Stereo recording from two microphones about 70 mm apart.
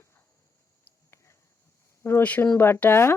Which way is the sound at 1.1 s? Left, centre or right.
Left.